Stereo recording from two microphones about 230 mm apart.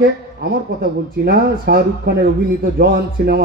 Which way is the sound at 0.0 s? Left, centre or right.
Right.